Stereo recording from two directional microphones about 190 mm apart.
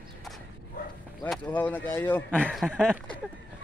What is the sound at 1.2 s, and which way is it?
Speech, 10° left (ahead or behind).